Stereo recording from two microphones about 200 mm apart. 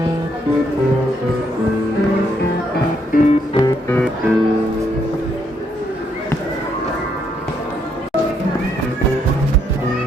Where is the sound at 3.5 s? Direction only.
20° left (ahead or behind).